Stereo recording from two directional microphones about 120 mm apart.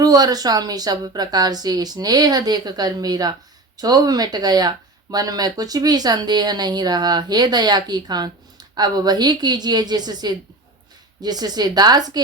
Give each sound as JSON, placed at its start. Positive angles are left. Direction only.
{"t": 0.0, "sound": "a woman's voice", "side_deg": -30}